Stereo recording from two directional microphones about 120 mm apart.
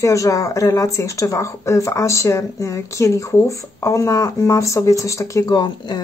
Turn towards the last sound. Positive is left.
turn(degrees=35)  # may be behind; listen again after turning